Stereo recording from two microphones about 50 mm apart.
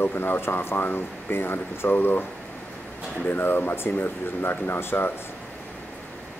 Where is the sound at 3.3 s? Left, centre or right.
Left.